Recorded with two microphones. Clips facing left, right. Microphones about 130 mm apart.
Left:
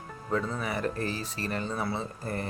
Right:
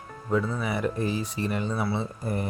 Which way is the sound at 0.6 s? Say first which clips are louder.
Right 3 dB; 10° right (ahead or behind).